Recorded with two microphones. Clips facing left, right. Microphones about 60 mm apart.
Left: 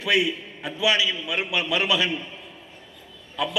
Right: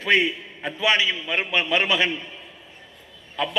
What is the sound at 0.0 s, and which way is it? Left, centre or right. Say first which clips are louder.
A man's voice: right 2 dB; right.